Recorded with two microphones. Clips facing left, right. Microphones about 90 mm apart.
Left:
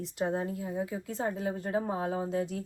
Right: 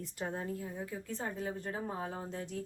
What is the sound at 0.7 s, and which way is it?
Speech, 90° left.